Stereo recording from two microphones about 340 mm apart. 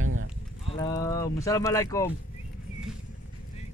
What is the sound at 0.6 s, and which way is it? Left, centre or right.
Speech, centre.